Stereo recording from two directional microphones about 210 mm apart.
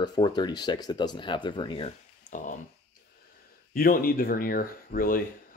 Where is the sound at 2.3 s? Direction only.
40° left (ahead or behind).